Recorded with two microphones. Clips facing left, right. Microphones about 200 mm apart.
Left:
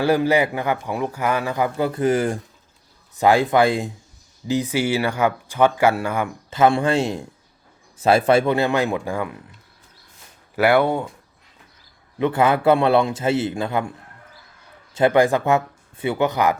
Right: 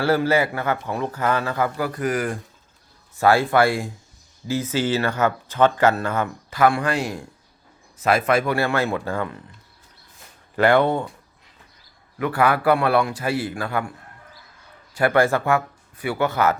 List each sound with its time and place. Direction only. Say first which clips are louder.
0.0 s speech: left 2 dB; 15° left (ahead or behind)
6.5 s a man's voice: left 3 dB; 25° left (ahead or behind)
10.5 s speech: even; 10° left (ahead or behind)
12.2 s a man's voice: left 2 dB; 20° left (ahead or behind)
14.9 s speech: left 2 dB; 20° left (ahead or behind)